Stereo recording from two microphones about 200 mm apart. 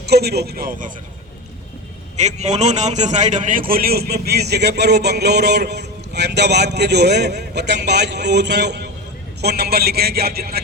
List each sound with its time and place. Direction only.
0.1 s speech: 55° right (ahead or behind)
2.1 s a man's voice: 35° right (ahead or behind); by 10.6 s 50° right (ahead or behind)